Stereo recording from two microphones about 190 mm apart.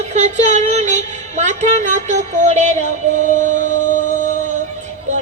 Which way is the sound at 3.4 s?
40° right (ahead or behind).